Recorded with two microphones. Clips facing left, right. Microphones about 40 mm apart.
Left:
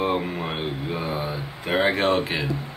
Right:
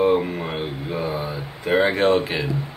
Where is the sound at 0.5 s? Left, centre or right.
Centre.